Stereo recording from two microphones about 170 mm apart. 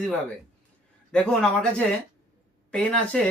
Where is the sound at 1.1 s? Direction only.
5° left (ahead or behind).